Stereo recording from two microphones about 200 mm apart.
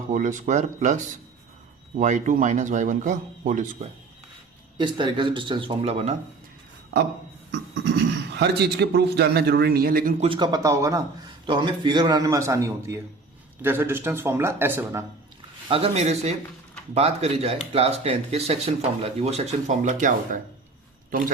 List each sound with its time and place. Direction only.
0.1 s speech: 40° right (ahead or behind)
4.8 s a man's voice: 25° right (ahead or behind)
7.9 s speech: 60° right (ahead or behind)
10.2 s a man's voice: 25° right (ahead or behind)
15.7 s speech: 30° right (ahead or behind)